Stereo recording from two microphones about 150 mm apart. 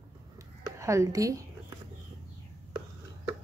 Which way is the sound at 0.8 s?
20° right (ahead or behind).